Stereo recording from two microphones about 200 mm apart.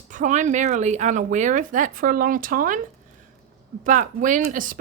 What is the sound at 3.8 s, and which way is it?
Speech, 40° right (ahead or behind).